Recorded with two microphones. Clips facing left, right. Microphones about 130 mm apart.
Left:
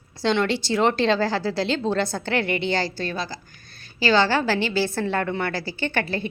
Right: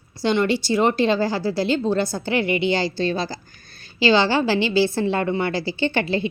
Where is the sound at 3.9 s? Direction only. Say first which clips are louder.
Right 2 dB; 20° right (ahead or behind).